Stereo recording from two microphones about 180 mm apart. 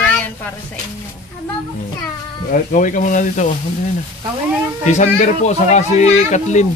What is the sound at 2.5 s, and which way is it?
Speech, 45° left (ahead or behind).